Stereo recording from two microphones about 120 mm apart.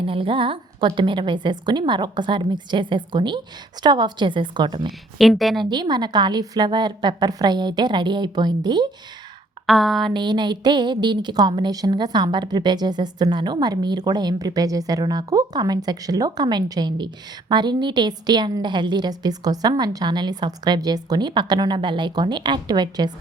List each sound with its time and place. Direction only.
0.0 s a woman's voice: 50° right (ahead or behind)
4.9 s a woman's voice: centre (ahead or behind)
5.6 s a woman's voice: 35° right (ahead or behind)
9.6 s a woman's voice: centre (ahead or behind)
10.1 s a woman's voice: 40° right (ahead or behind)